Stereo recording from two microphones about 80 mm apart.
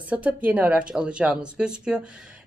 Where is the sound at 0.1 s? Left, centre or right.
Centre.